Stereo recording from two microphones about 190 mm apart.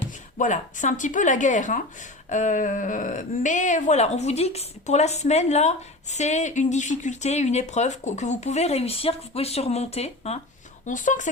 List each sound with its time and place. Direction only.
0.3 s speech: 40° left (ahead or behind)